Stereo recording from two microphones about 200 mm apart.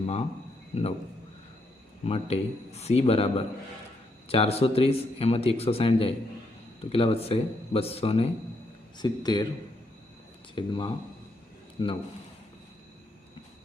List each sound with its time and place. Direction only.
0.0 s a man's voice: 30° left (ahead or behind)
2.0 s speech: 30° left (ahead or behind)
10.5 s speech: 25° left (ahead or behind)